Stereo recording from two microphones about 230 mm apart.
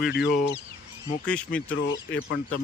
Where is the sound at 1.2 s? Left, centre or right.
Centre.